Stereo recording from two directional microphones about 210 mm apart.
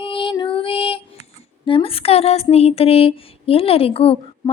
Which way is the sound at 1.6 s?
25° left (ahead or behind).